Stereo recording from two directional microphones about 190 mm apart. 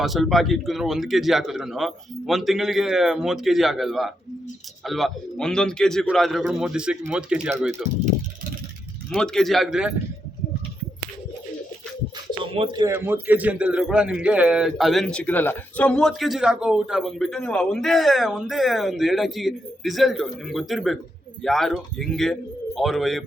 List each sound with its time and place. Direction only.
0.0 s a man's voice: centre (ahead or behind)
9.1 s a man's voice: 5° left (ahead or behind)
12.4 s a man's voice: 25° right (ahead or behind); by 23.2 s centre (ahead or behind)